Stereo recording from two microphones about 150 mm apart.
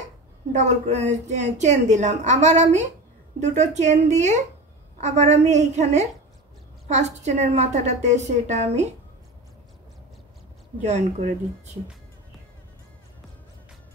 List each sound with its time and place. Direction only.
0.5 s a woman's voice: 50° right (ahead or behind)
10.8 s a woman's voice: 50° right (ahead or behind)